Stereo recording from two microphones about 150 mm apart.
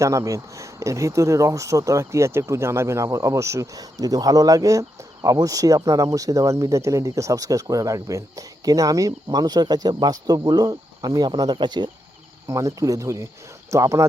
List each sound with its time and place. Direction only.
0.0 s speech: 20° right (ahead or behind)